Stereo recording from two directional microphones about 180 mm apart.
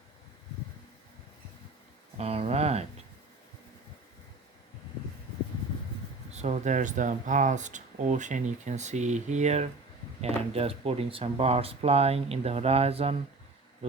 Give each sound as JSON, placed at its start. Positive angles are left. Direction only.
{"t": 2.1, "sound": "speech", "side_deg": -35}
{"t": 6.3, "sound": "speech", "side_deg": -40}